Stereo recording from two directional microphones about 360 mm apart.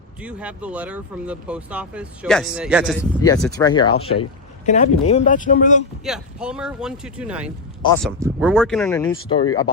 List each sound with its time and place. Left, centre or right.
0.2 s speech: centre
3.2 s speech: centre
6.1 s speech: centre